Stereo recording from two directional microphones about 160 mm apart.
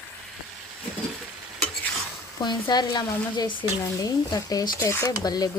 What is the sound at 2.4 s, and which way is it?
Speech, 25° left (ahead or behind).